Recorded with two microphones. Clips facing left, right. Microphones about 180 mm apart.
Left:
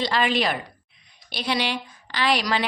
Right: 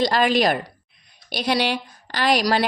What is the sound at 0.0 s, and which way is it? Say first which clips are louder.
A woman's voice: right 4 dB; 45° right (ahead or behind).